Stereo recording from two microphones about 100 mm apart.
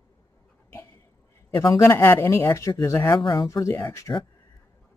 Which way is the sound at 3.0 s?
50° left (ahead or behind).